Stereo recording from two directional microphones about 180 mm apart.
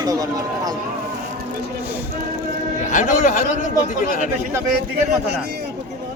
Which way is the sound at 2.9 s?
45° left (ahead or behind).